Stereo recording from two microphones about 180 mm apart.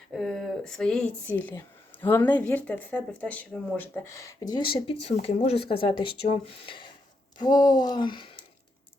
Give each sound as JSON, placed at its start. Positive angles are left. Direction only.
{"t": 0.1, "sound": "speech", "side_deg": 0}